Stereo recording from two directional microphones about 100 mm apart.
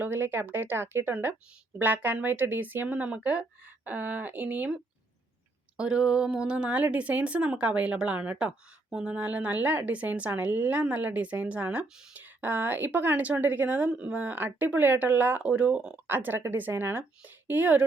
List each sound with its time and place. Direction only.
0.0 s a woman's voice: 20° right (ahead or behind)
5.7 s a woman's voice: 10° right (ahead or behind)